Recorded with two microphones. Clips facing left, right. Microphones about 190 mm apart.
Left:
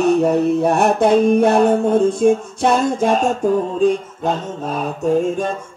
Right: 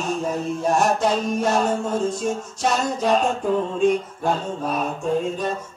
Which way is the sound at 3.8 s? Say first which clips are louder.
Left 3 dB; 35° left (ahead or behind).